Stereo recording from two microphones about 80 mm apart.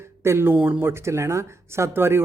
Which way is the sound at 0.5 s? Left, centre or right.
Centre.